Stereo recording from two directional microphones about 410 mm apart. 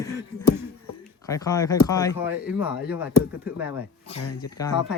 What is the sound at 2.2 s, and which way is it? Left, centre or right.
Speech, centre.